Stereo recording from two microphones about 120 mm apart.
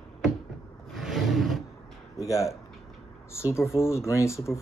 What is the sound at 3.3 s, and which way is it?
Speech, 20° left (ahead or behind).